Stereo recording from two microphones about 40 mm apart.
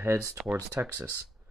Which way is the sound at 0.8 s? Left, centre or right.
Right.